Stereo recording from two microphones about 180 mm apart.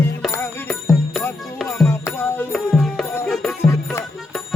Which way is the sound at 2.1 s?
10° left (ahead or behind).